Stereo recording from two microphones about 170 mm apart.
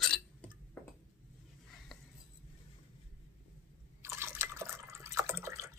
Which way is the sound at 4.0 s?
15° right (ahead or behind).